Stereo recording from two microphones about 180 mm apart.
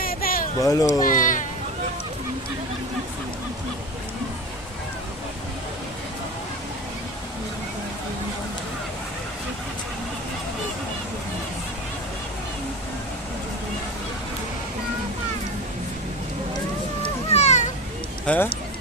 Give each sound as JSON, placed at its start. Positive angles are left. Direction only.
{"t": 0.0, "sound": "a sound", "side_deg": 55}
{"t": 0.6, "sound": "speech", "side_deg": 20}
{"t": 1.0, "sound": "speech", "side_deg": 45}
{"t": 17.0, "sound": "cat", "side_deg": 35}
{"t": 18.3, "sound": "speech", "side_deg": 5}